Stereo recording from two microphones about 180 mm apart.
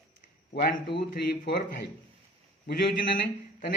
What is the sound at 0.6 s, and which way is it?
A man's voice, 60° left (ahead or behind).